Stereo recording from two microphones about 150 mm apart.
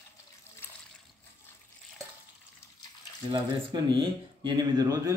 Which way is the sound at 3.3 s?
35° right (ahead or behind).